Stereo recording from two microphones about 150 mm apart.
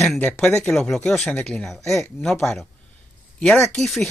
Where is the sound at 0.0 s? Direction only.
Centre (ahead or behind).